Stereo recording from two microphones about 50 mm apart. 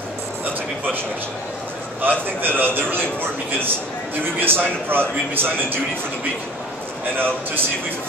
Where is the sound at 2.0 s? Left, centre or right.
Right.